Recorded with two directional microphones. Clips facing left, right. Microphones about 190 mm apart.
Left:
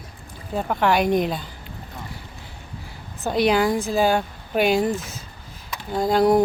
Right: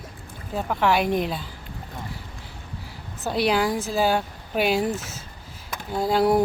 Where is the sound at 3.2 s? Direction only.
5° right (ahead or behind).